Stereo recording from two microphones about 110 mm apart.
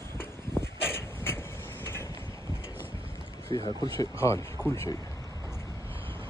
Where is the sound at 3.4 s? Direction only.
35° left (ahead or behind).